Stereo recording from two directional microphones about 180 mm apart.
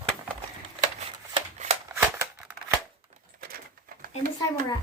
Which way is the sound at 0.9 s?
40° right (ahead or behind).